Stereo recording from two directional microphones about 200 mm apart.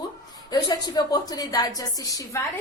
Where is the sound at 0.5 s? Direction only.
20° left (ahead or behind).